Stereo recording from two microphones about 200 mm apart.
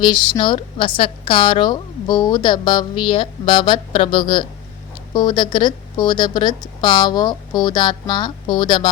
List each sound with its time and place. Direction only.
0.0 s a woman's voice: 25° left (ahead or behind)